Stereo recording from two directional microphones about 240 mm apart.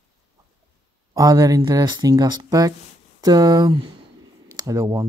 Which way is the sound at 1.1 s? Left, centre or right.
Centre.